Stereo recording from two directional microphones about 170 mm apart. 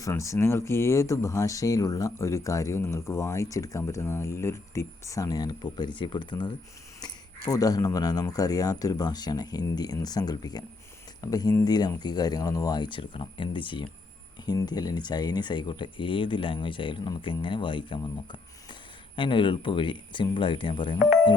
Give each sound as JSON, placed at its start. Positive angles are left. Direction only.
{"t": 0.0, "sound": "speech", "side_deg": 15}